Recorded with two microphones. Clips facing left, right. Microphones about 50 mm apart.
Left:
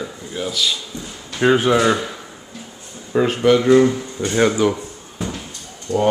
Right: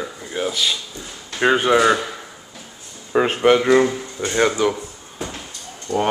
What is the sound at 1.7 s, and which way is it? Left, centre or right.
Speech, centre.